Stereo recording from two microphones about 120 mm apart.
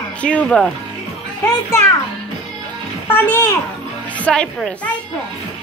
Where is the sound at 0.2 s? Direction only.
10° left (ahead or behind).